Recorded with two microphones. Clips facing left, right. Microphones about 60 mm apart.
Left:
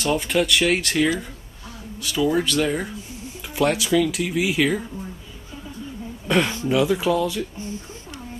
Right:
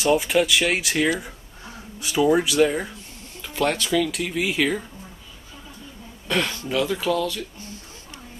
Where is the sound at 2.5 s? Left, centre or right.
Centre.